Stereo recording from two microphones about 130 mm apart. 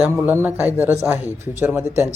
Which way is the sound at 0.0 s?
15° right (ahead or behind).